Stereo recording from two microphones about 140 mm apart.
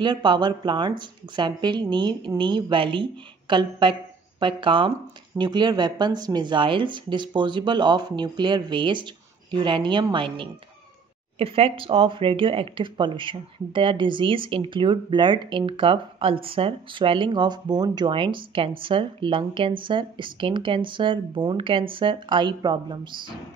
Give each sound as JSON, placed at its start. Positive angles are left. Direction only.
{"t": 0.0, "sound": "speech", "side_deg": -35}